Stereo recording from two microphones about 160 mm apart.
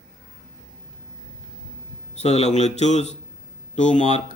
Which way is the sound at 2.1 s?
45° left (ahead or behind).